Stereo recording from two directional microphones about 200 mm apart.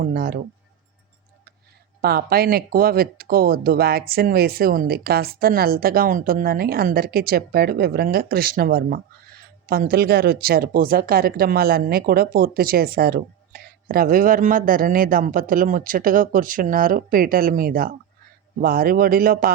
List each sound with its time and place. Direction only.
0.0 s speech: 50° right (ahead or behind)
2.0 s speech: 50° right (ahead or behind)